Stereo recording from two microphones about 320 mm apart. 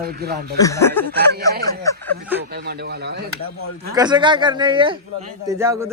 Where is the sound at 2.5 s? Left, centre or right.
Right.